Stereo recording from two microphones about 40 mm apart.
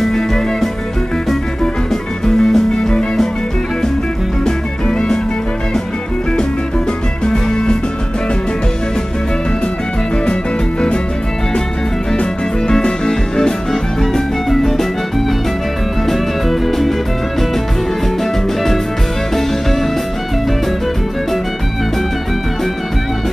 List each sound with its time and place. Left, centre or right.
0.0 s music: centre
1.9 s music: centre
4.5 s music: centre
7.2 s music: left
12.2 s music: centre
16.1 s music: centre